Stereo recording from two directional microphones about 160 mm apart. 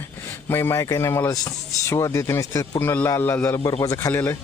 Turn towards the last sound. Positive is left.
turn(degrees=15)  # may be behind; listen again after turning